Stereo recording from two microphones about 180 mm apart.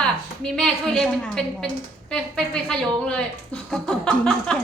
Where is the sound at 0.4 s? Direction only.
5° left (ahead or behind).